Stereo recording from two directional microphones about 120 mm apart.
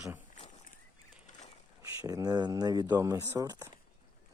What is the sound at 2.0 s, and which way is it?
Speech, 30° right (ahead or behind).